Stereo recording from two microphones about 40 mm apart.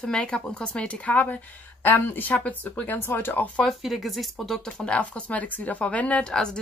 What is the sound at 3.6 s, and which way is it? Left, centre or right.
Speech, centre.